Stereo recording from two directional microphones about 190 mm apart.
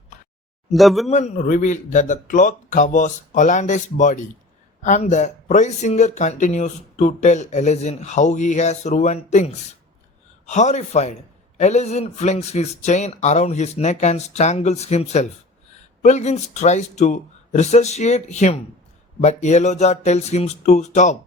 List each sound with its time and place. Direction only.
0.7 s speech: centre (ahead or behind)
1.1 s a man's voice: 40° left (ahead or behind)